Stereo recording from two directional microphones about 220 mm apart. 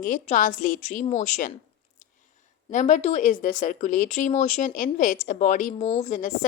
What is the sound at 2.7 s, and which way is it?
Speech, 35° left (ahead or behind).